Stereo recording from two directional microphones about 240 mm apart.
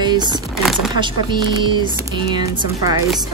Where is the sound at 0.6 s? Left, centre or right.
Centre.